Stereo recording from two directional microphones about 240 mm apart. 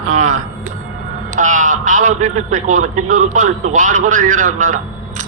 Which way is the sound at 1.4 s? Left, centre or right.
Right.